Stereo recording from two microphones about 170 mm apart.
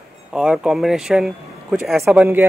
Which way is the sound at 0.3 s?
5° right (ahead or behind).